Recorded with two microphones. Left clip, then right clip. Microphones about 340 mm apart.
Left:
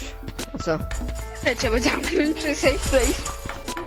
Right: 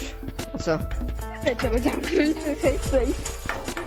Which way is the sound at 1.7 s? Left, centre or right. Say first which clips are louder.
Left 3 dB; left.